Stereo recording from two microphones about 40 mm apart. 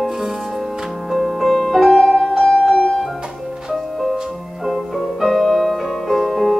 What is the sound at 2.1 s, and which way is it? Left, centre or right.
Music, centre.